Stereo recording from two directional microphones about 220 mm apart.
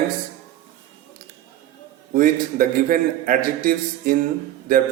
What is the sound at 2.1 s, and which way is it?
A man's voice, 40° right (ahead or behind).